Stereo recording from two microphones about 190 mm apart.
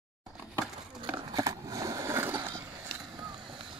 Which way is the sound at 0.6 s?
10° right (ahead or behind).